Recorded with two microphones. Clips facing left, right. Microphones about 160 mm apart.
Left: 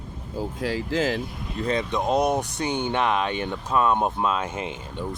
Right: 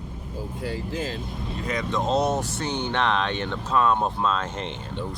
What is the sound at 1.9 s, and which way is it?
Speech, 15° left (ahead or behind).